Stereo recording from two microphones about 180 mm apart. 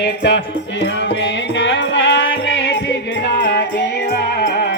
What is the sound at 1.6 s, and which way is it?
Music, 90° left.